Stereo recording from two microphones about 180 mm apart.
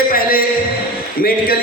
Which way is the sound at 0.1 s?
50° left (ahead or behind).